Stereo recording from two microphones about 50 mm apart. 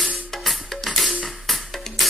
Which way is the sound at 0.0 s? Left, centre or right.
Centre.